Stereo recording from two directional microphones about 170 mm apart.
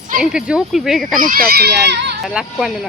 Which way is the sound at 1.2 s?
60° right (ahead or behind).